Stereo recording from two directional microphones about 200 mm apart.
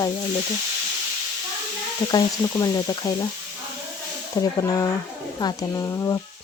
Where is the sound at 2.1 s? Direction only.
20° left (ahead or behind).